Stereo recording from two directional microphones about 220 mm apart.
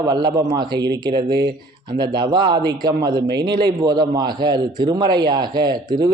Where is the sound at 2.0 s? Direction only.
20° right (ahead or behind).